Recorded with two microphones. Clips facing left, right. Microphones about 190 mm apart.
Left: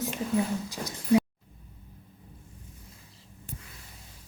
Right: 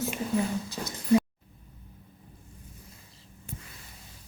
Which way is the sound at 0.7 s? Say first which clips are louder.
Right 1 dB; 15° left (ahead or behind).